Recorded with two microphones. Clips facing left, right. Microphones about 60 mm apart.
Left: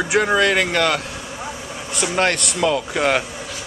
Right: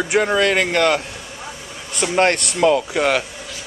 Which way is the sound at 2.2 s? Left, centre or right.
Right.